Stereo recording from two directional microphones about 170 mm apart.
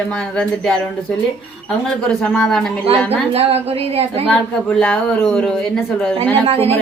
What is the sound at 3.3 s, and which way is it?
Speech, 35° right (ahead or behind).